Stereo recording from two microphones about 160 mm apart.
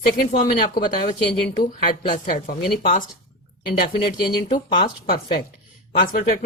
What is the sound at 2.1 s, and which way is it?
Speech, 60° left (ahead or behind).